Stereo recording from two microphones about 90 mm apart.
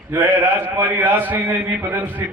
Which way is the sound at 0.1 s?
20° right (ahead or behind).